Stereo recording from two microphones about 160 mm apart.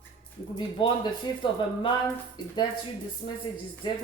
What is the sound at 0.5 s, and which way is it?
Speech, 30° left (ahead or behind).